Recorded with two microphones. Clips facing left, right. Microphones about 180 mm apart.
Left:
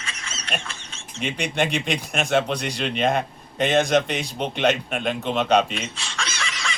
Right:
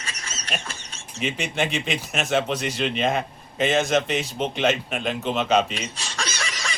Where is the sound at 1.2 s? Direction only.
Centre (ahead or behind).